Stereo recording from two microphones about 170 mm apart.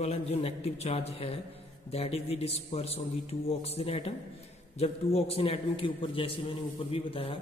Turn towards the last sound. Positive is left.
turn(degrees=30)  # may be behind; listen again after turning